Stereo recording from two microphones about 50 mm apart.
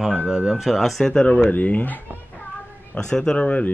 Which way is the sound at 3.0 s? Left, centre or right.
Centre.